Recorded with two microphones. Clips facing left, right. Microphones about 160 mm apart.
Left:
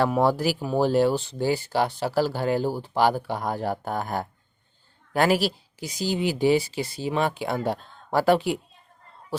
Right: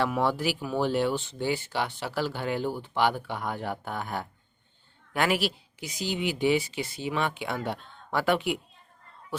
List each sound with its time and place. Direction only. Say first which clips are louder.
0.0 s speech: left 5 dB; 40° left (ahead or behind)